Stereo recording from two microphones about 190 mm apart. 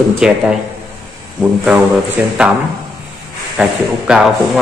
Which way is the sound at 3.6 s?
5° right (ahead or behind).